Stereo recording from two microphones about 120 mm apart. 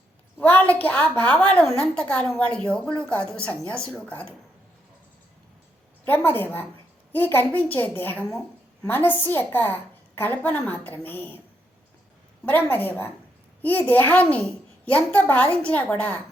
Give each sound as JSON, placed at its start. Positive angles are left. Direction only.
{"t": 0.3, "sound": "a woman's voice", "side_deg": 15}
{"t": 6.1, "sound": "a woman's voice", "side_deg": 15}
{"t": 12.5, "sound": "a woman's voice", "side_deg": 15}